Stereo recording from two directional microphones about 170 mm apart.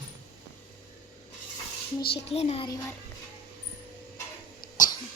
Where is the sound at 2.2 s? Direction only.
35° left (ahead or behind).